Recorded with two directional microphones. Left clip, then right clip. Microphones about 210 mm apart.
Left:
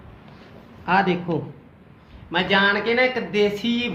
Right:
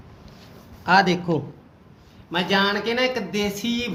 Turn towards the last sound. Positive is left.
turn(degrees=-10)  # may be behind; listen again after turning